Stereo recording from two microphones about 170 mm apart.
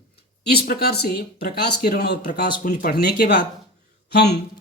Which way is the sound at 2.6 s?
60° left (ahead or behind).